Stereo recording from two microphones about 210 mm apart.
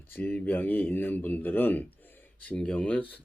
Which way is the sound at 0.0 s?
10° left (ahead or behind).